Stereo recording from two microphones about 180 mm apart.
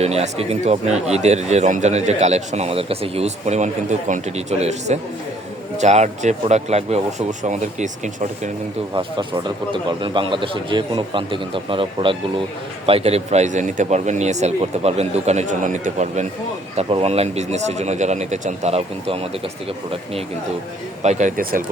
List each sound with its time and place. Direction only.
0.0 s a man's voice: 35° right (ahead or behind)
9.7 s a man's voice: 25° right (ahead or behind)
21.0 s speech: 40° right (ahead or behind)